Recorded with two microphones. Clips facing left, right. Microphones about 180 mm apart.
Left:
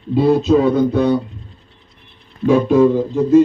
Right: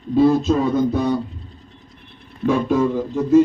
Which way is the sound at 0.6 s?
65° left (ahead or behind).